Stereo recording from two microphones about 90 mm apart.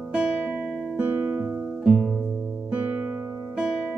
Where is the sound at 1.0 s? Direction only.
20° right (ahead or behind).